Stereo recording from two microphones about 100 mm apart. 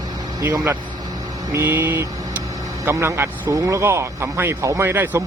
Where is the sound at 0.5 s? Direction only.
25° right (ahead or behind).